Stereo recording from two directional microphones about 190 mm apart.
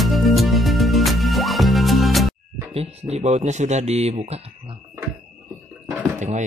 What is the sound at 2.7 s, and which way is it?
Speech, 35° right (ahead or behind).